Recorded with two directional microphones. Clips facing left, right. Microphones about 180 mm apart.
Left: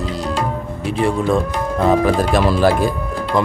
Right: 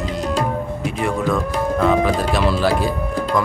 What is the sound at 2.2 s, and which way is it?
Speech, 45° left (ahead or behind).